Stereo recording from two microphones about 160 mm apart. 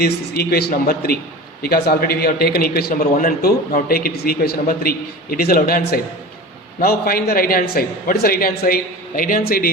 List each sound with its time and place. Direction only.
0.0 s a man's voice: 75° left (ahead or behind)